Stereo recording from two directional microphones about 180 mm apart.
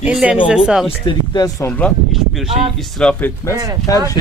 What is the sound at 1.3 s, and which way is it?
Speech, 20° left (ahead or behind).